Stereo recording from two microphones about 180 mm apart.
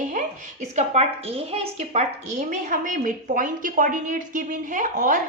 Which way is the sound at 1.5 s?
35° right (ahead or behind).